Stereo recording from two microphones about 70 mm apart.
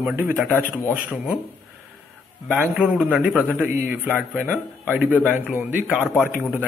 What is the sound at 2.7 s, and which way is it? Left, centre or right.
A man's voice, centre.